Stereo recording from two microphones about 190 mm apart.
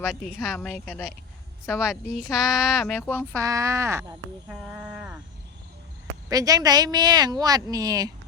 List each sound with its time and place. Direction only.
0.4 s speech: centre (ahead or behind)
3.3 s speech: 15° right (ahead or behind)
4.4 s speech: 5° right (ahead or behind)
6.2 s speech: 20° right (ahead or behind)